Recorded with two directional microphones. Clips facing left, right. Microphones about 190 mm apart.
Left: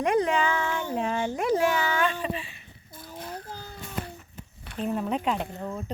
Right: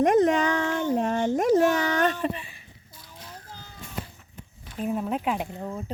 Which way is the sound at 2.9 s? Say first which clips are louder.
Left 8 dB; 50° left (ahead or behind).